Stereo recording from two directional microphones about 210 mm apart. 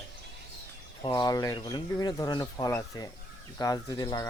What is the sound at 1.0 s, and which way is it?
Speech, 20° left (ahead or behind).